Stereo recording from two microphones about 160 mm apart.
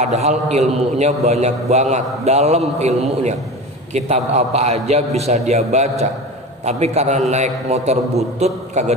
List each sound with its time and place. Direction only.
0.0 s a man's voice: 45° right (ahead or behind)